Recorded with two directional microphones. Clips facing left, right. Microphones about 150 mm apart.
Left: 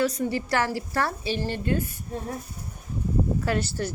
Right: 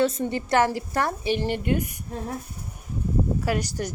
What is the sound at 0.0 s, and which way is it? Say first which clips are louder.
A woman's voice: right 2 dB; 25° right (ahead or behind).